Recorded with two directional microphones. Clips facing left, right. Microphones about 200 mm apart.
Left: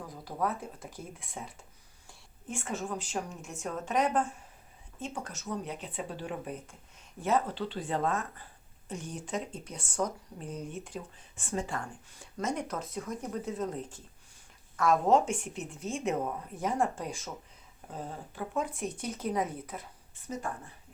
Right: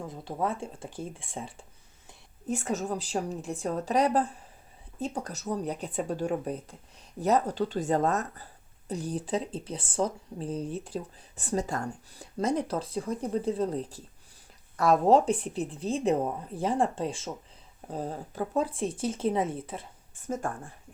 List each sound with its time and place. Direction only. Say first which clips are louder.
0.0 s speech: right 2 dB; 25° right (ahead or behind)
17.9 s speech: right 6 dB; 40° right (ahead or behind)
20.2 s speech: right 5 dB; 50° right (ahead or behind)